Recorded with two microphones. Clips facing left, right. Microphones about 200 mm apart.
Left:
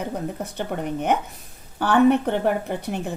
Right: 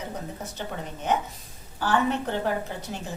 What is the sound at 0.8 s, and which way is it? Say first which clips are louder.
A woman's voice: left 4 dB; 65° left (ahead or behind).